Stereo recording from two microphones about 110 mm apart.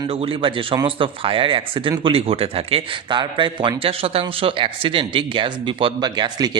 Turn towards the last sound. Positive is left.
turn(degrees=-40)  # may be behind; listen again after turning